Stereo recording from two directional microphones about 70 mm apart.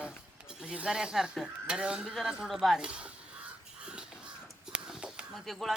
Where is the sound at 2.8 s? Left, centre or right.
Centre.